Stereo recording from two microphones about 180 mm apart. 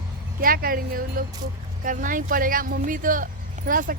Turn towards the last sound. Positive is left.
turn(degrees=-50)  # may be behind; listen again after turning